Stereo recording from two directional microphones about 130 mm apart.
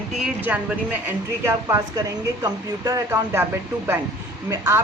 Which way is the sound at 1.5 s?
25° right (ahead or behind).